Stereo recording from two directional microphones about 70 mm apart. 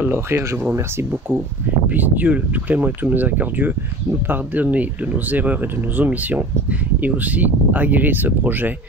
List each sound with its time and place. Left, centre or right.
0.0 s speech: right
1.9 s speech: right